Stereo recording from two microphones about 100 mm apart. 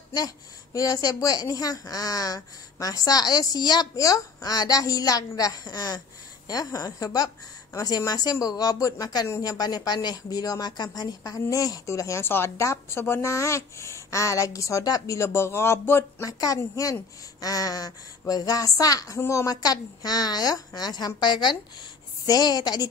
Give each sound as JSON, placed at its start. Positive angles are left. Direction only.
{"t": 0.7, "sound": "a woman's voice", "side_deg": 35}
{"t": 16.3, "sound": "a woman's voice", "side_deg": 35}